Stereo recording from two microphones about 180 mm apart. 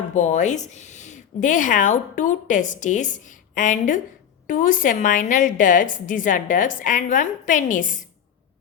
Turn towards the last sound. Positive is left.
turn(degrees=45)  # may be behind; listen again after turning